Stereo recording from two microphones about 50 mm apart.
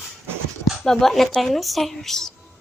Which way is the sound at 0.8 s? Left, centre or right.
Centre.